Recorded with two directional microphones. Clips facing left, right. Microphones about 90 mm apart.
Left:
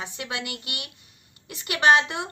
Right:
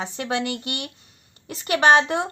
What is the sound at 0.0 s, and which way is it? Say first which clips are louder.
Speech: right 7 dB; 35° right (ahead or behind).